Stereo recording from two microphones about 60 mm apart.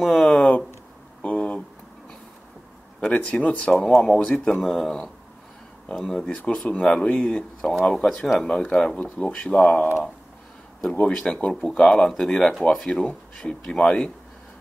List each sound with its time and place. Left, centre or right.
0.0 s speech: centre
1.2 s a sound: left
3.0 s speech: centre
3.7 s speech: centre; by 7.7 s left
7.7 s speech: centre